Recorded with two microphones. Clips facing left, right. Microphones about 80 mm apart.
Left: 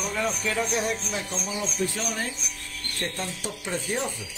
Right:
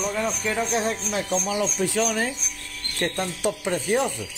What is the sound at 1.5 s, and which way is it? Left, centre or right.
Speech, right.